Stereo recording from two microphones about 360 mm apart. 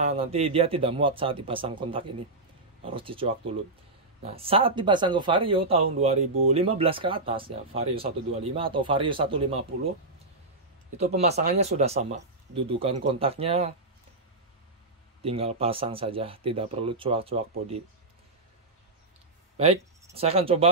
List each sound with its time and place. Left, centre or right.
0.0 s speech: centre
11.0 s speech: centre
15.2 s speech: centre
19.5 s speech: centre